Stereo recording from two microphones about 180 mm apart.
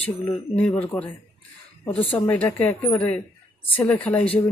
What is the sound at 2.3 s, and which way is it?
Speech, 10° left (ahead or behind).